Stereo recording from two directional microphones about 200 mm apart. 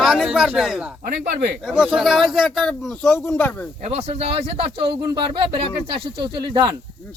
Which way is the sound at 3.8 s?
30° right (ahead or behind).